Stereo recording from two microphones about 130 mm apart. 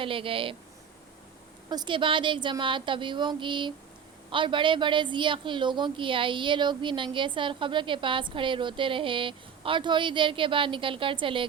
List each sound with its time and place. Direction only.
0.0 s a woman's voice: 45° right (ahead or behind)
1.7 s a woman's voice: 35° right (ahead or behind)